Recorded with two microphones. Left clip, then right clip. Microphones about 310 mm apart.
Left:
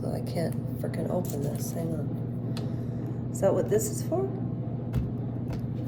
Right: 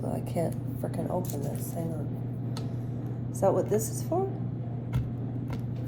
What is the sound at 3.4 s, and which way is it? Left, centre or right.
Speech, centre.